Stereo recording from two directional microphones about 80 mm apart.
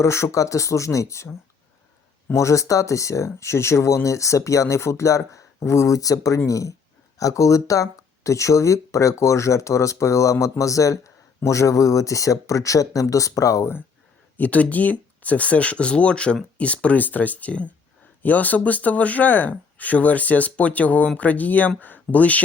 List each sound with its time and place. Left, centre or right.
0.0 s speech: left
14.3 s speech: centre